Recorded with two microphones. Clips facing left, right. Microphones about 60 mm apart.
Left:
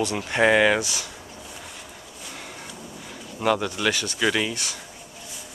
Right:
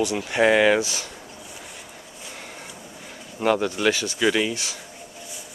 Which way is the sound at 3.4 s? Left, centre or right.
Centre.